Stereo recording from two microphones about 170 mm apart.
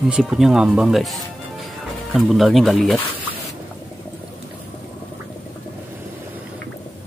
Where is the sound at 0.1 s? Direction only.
5° right (ahead or behind).